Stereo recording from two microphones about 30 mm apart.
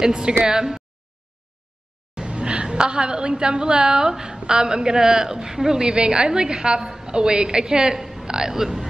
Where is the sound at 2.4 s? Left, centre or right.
Right.